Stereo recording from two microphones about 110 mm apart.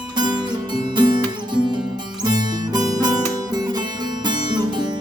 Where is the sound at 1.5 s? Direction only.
45° right (ahead or behind).